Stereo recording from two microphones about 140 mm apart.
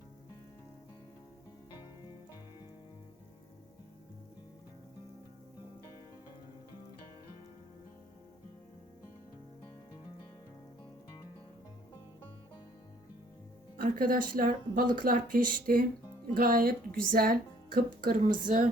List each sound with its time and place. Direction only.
13.7 s a woman's voice: 80° right
18.4 s speech: 70° right (ahead or behind)